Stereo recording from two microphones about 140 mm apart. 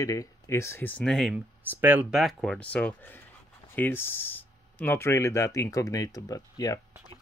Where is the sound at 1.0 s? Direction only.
Centre (ahead or behind).